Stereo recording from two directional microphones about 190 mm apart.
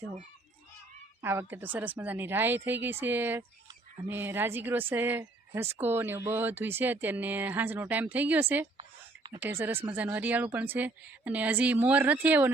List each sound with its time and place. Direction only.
1.2 s a woman's voice: 10° right (ahead or behind)
8.8 s a sound: 25° right (ahead or behind)
9.4 s a woman's voice: 10° right (ahead or behind)